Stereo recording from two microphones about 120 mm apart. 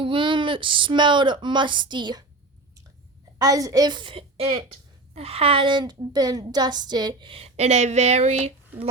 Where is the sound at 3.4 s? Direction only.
30° right (ahead or behind); by 8.5 s 65° right (ahead or behind).